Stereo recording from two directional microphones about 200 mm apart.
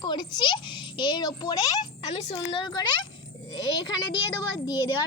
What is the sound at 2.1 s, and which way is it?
Speech, 30° left (ahead or behind).